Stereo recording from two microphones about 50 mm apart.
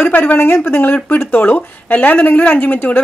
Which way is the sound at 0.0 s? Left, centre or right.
Left.